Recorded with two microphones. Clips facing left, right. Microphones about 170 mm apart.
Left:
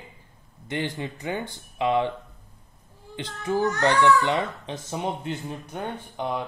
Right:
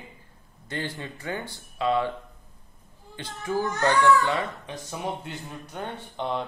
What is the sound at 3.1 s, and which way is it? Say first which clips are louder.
Speech: left 2 dB; 20° left (ahead or behind).